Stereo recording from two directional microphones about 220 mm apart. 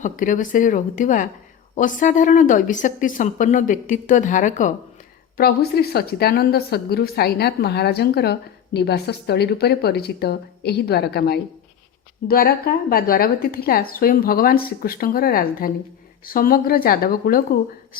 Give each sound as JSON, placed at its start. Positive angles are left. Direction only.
{"t": 0.0, "sound": "a woman's voice", "side_deg": 35}